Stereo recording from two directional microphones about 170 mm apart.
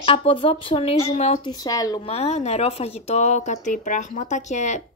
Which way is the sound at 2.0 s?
35° left (ahead or behind).